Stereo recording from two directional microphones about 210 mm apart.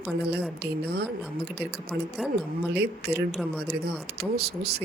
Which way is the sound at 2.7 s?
50° right (ahead or behind).